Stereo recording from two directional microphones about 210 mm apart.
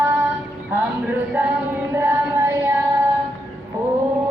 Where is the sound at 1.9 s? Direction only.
10° right (ahead or behind).